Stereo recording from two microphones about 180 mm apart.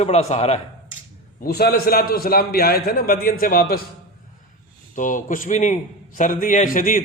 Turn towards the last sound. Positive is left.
turn(degrees=50)  # may be behind; listen again after turning